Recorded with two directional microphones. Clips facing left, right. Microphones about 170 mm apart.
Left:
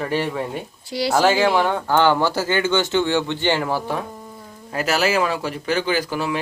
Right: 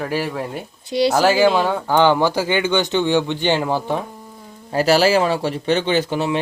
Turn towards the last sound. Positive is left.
turn(degrees=-25)  # may be behind; listen again after turning